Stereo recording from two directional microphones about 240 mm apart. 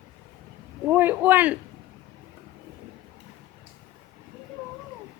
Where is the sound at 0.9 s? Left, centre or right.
Centre.